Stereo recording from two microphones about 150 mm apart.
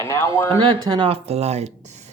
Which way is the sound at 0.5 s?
30° right (ahead or behind).